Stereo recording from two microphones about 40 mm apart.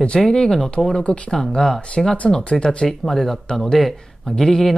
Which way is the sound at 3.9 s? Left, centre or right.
Centre.